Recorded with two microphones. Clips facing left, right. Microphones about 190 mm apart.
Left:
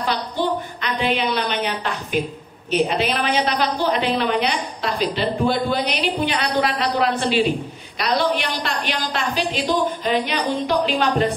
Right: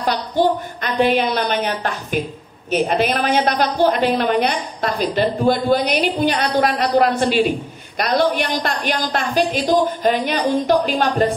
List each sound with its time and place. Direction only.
0.8 s a woman's voice: 45° right (ahead or behind)